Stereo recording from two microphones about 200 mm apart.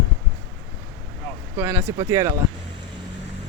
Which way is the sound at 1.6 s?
10° right (ahead or behind).